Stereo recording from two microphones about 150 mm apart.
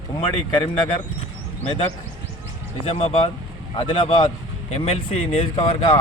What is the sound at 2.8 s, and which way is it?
A man's voice, 40° left (ahead or behind).